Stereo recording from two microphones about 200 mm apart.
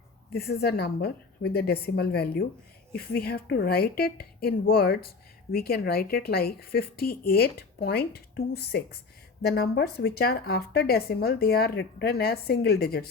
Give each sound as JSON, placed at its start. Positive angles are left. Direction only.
{"t": 0.3, "sound": "speech", "side_deg": 50}